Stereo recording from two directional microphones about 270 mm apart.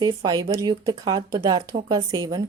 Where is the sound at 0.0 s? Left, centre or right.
Centre.